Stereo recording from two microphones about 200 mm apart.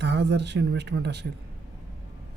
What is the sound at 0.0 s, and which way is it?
Speech, 60° right (ahead or behind).